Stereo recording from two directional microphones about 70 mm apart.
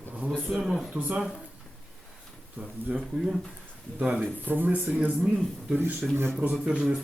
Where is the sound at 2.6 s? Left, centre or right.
Right.